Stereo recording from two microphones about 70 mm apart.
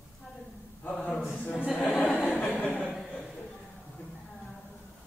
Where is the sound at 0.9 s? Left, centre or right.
Centre.